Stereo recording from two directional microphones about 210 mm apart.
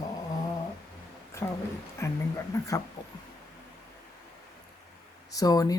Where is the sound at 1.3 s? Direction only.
15° left (ahead or behind).